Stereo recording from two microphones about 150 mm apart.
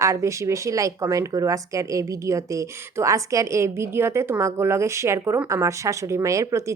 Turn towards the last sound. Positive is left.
turn(degrees=-20)  # may be behind; listen again after turning